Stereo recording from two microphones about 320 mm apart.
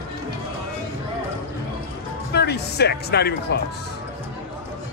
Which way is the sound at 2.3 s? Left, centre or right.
Left.